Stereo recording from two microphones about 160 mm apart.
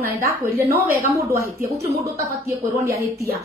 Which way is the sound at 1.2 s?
20° right (ahead or behind).